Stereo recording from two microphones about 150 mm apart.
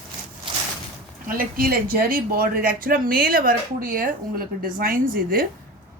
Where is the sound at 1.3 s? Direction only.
75° right (ahead or behind).